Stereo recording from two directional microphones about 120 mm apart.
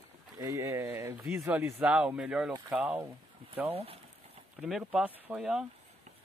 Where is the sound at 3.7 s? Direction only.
55° right (ahead or behind).